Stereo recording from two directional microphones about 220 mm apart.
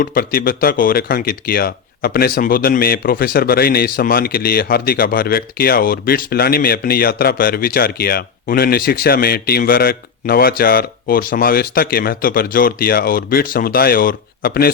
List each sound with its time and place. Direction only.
0.0 s speech: 40° left (ahead or behind)